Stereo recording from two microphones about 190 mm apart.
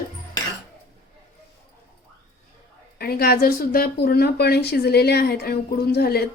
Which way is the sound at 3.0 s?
55° left (ahead or behind).